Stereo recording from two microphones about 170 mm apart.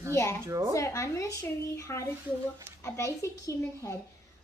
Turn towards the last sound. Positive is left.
turn(degrees=15)  # may be behind; listen again after turning